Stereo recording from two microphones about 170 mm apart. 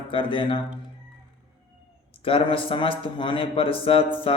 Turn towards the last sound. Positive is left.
turn(degrees=30)  # may be behind; listen again after turning